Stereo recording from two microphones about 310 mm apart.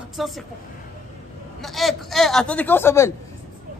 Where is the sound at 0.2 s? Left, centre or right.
Centre.